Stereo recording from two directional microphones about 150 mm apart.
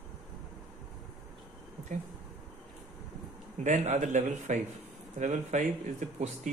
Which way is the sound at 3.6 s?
50° right (ahead or behind).